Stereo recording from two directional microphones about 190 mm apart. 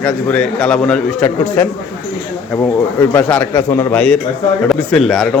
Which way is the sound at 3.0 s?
10° left (ahead or behind).